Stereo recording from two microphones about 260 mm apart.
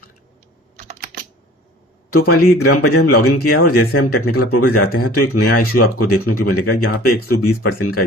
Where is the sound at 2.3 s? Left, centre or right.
Left.